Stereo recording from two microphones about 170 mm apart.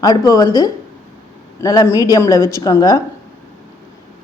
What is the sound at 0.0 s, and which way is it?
A woman's voice, 20° left (ahead or behind).